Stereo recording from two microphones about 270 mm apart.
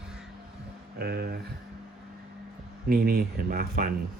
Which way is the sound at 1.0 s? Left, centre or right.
Right.